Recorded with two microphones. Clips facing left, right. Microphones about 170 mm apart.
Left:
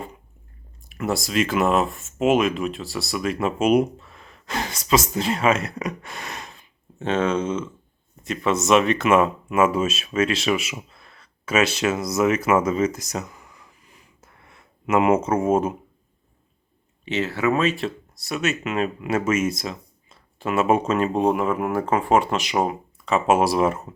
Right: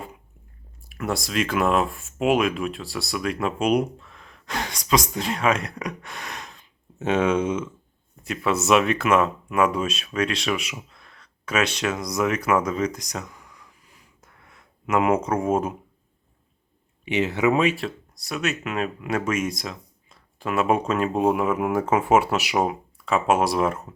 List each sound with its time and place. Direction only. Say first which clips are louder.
0.9 s speech: left 2 dB; centre (ahead or behind)
7.0 s speech: right 1 dB; 10° right (ahead or behind); by 13.7 s 5° left (ahead or behind)
14.2 s a sound: even; 5° left (ahead or behind)
17.1 s speech: right 1 dB; 15° right (ahead or behind)
17.7 s speech: left 3 dB; centre (ahead or behind)